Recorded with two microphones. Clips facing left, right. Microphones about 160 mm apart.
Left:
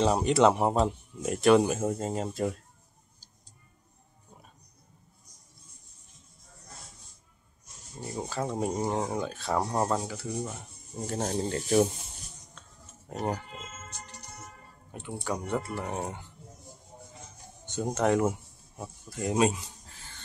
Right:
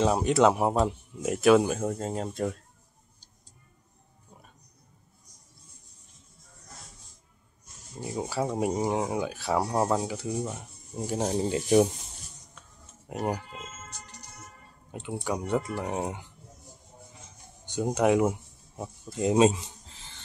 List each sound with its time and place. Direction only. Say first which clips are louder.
0.0 s speech: even; centre (ahead or behind)
8.0 s speech: right 3 dB; 10° right (ahead or behind)
13.1 s speech: right 2 dB; 10° right (ahead or behind)
14.9 s speech: right 2 dB; 20° right (ahead or behind)
17.6 s speech: right 3 dB; 10° right (ahead or behind)